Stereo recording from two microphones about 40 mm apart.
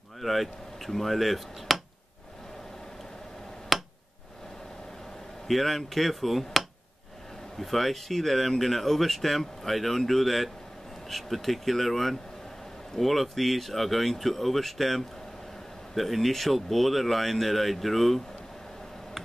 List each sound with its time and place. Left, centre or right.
0.2 s speech: centre
3.7 s a sound: centre
5.5 s speech: centre